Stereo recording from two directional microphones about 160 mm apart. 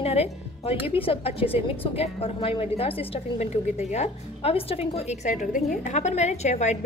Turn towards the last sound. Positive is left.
turn(degrees=45)  # may be behind; listen again after turning